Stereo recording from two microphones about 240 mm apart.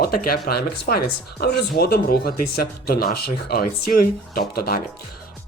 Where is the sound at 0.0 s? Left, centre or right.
Left.